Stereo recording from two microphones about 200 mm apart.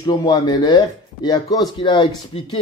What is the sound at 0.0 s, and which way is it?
Speech, 20° left (ahead or behind).